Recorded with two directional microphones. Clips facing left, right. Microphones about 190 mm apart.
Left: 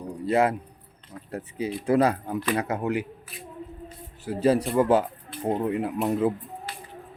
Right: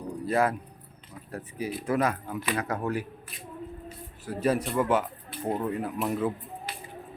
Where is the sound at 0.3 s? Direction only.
25° left (ahead or behind).